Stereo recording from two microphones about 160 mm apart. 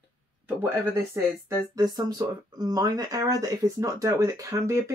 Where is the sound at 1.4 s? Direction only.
25° right (ahead or behind).